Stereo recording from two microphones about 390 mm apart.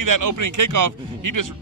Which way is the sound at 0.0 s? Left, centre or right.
Right.